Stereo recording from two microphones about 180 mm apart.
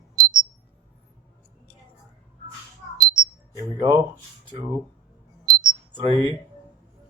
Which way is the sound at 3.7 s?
30° right (ahead or behind).